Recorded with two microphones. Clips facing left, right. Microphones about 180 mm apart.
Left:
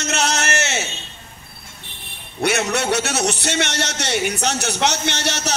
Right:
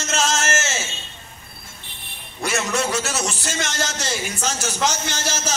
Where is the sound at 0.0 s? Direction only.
70° left (ahead or behind).